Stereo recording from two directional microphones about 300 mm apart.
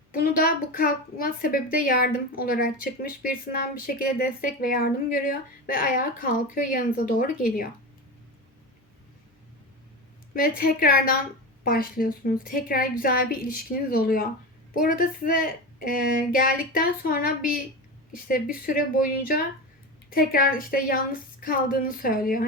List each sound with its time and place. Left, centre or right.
0.1 s a woman's voice: left
10.3 s a woman's voice: left